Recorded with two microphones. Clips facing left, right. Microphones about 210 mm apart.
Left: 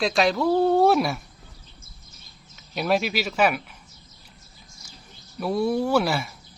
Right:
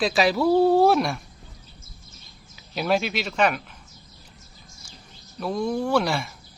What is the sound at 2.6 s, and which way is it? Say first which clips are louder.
Speech: even; centre (ahead or behind).